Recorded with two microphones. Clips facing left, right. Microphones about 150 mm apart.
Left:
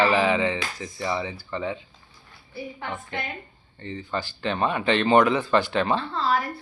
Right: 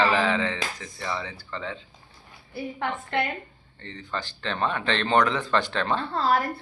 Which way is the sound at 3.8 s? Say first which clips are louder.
Left 4 dB; 10° left (ahead or behind).